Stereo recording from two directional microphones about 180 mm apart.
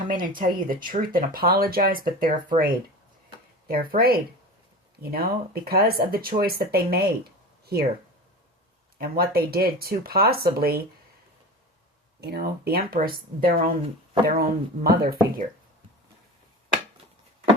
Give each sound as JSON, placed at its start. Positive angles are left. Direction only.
{"t": 0.1, "sound": "speech", "side_deg": -50}
{"t": 7.6, "sound": "a sound", "side_deg": -60}
{"t": 9.0, "sound": "speech", "side_deg": -55}
{"t": 12.2, "sound": "speech", "side_deg": -60}